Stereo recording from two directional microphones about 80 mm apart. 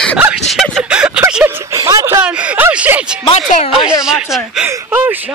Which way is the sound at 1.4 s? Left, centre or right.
Right.